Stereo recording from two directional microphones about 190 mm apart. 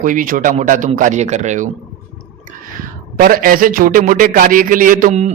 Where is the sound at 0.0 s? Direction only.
45° right (ahead or behind).